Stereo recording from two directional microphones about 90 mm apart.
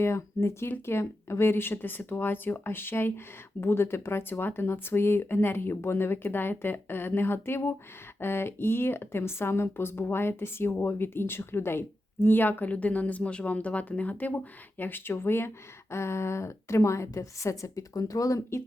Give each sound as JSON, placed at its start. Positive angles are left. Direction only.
{"t": 0.0, "sound": "speech", "side_deg": 30}